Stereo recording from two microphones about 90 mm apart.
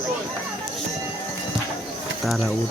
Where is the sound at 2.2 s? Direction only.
Centre (ahead or behind).